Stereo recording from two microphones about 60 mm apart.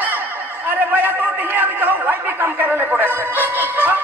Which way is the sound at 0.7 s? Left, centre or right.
Right.